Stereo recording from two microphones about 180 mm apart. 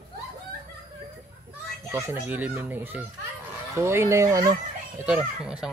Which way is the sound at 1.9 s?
15° right (ahead or behind).